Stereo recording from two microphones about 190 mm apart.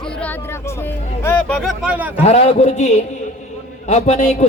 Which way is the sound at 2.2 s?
35° left (ahead or behind).